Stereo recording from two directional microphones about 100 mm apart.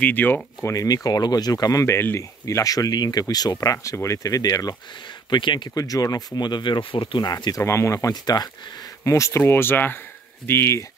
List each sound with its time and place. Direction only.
0.0 s speech: 20° left (ahead or behind)
0.7 s speech: 35° left (ahead or behind)
2.4 s speech: 35° left (ahead or behind)
5.3 s speech: 50° left (ahead or behind)
5.8 s speech: 35° left (ahead or behind)
7.6 s speech: 30° left (ahead or behind)